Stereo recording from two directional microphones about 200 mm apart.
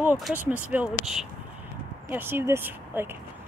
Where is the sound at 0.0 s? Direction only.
10° right (ahead or behind).